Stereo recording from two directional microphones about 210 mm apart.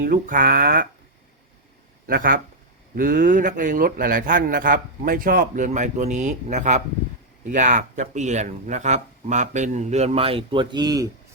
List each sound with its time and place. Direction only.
0.0 s speech: 40° right (ahead or behind)
2.0 s a man's voice: 45° right (ahead or behind); by 11.1 s 20° right (ahead or behind)